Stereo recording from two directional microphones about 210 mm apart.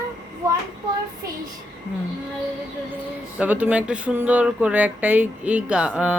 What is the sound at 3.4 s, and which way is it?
Speech, 5° right (ahead or behind).